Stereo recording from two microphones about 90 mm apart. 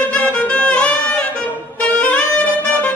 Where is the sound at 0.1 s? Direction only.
15° left (ahead or behind).